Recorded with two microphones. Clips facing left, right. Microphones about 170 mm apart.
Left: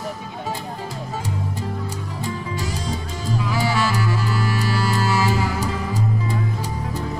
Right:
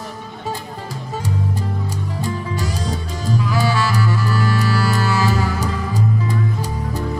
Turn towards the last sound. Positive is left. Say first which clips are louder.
# right 2 dB
turn(degrees=25)  # may be behind; listen again after turning